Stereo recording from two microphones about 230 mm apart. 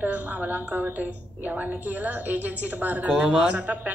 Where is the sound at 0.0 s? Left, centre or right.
Centre.